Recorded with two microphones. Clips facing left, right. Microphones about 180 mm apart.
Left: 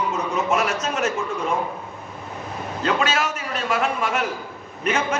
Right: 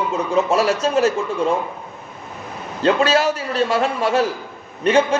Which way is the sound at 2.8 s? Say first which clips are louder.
Right 6 dB; 30° right (ahead or behind).